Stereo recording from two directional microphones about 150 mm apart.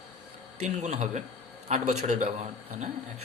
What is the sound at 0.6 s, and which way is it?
A man's voice, 50° right (ahead or behind).